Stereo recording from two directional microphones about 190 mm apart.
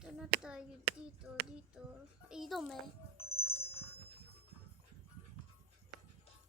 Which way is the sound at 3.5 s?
30° left (ahead or behind).